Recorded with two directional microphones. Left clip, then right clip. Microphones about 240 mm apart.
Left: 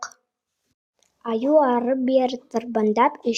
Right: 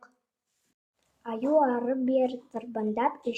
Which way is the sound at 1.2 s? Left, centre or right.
Left.